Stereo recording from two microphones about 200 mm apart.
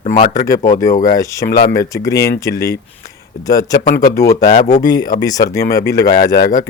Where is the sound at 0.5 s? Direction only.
15° left (ahead or behind).